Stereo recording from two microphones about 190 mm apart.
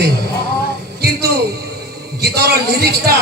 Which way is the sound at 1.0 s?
55° right (ahead or behind).